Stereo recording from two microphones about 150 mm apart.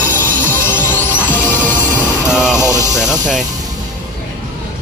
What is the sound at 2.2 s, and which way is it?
Music, 5° right (ahead or behind).